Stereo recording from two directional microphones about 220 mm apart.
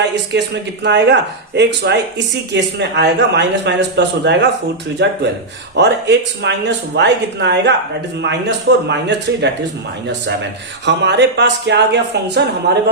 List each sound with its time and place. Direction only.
0.3 s speech: 50° right (ahead or behind)
10.8 s speech: 50° right (ahead or behind)